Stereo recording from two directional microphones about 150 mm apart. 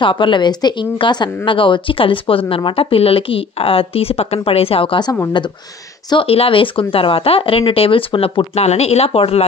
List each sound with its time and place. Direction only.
0.0 s a woman's voice: 35° left (ahead or behind)